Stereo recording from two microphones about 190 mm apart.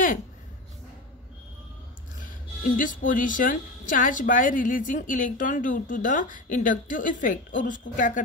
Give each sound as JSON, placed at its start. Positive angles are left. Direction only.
{"t": 2.1, "sound": "a woman's voice", "side_deg": 45}